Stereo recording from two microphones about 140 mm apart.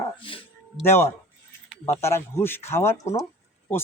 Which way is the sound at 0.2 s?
40° left (ahead or behind).